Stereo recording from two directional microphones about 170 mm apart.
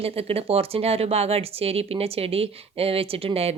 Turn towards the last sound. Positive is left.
turn(degrees=-35)  # may be behind; listen again after turning